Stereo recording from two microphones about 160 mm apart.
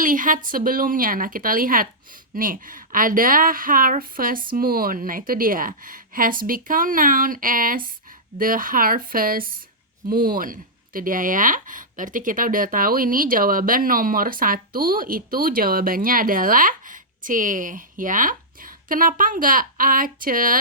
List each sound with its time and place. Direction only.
0.0 s speech: 55° right (ahead or behind)